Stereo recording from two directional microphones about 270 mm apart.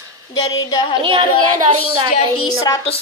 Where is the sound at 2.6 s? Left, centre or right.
Centre.